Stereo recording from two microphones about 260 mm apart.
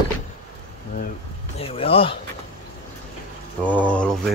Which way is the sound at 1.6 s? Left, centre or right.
Left.